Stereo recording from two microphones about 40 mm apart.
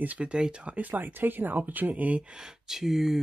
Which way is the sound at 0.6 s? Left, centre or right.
Right.